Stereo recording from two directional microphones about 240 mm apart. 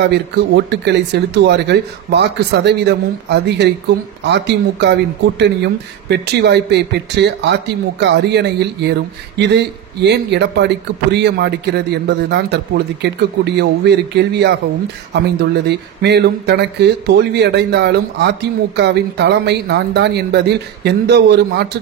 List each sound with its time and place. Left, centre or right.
0.0 s speech: right